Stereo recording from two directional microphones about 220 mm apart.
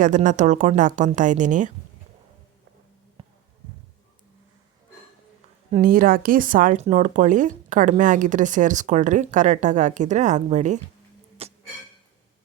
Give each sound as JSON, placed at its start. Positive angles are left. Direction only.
{"t": 0.0, "sound": "speech", "side_deg": -35}
{"t": 5.7, "sound": "speech", "side_deg": -40}
{"t": 11.4, "sound": "a sound", "side_deg": -25}